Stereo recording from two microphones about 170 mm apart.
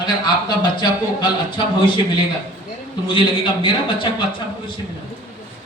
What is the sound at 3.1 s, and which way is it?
A man's voice, 30° left (ahead or behind).